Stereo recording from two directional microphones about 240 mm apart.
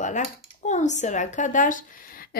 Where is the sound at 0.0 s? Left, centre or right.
Left.